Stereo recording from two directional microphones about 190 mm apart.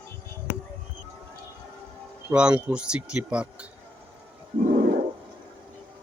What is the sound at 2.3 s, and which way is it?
Speech, 5° right (ahead or behind).